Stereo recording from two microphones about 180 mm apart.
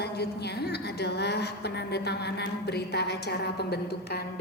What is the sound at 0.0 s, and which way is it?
A woman's voice, 65° left (ahead or behind).